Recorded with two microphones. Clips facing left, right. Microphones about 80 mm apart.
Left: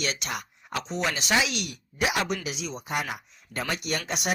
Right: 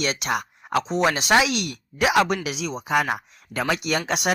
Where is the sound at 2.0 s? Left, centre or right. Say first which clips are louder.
Right 7 dB; right.